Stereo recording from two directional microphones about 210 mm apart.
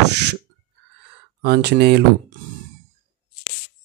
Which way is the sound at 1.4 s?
50° right (ahead or behind).